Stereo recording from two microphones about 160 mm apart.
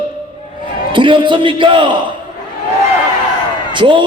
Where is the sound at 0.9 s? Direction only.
30° right (ahead or behind).